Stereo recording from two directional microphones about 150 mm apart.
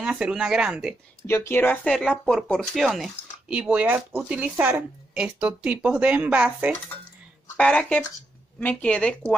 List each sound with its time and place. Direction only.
0.0 s speech: 5° right (ahead or behind)
1.2 s speech: 15° left (ahead or behind); by 6.7 s 10° right (ahead or behind)
7.5 s speech: 10° left (ahead or behind)